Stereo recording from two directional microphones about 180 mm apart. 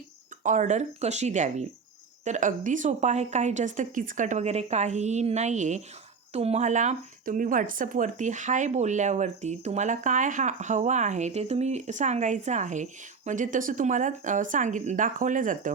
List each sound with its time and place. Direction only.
0.4 s speech: 45° right (ahead or behind)